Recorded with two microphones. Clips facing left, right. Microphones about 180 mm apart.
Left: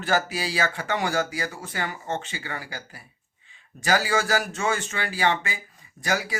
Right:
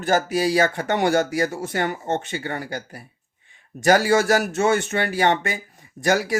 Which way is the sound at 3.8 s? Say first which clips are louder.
Right 7 dB; 65° right (ahead or behind).